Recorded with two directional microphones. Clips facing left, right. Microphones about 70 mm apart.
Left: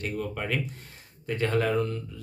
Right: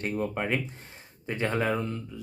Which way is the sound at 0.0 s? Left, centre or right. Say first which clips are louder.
Right 2 dB; right.